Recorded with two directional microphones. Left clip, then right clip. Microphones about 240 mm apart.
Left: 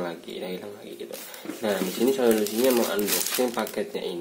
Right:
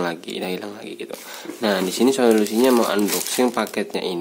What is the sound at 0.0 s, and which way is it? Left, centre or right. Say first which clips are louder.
Speech: right 7 dB; right.